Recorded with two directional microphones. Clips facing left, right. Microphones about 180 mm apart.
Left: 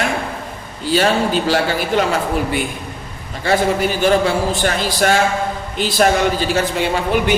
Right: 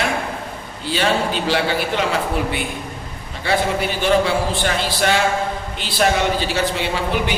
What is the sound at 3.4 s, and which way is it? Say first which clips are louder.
Speech: left 4 dB; 45° left (ahead or behind).